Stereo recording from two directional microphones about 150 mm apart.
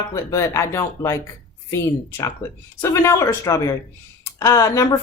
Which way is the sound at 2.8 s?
20° left (ahead or behind).